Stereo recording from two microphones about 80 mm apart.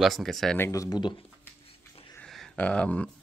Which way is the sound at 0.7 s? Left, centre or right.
Left.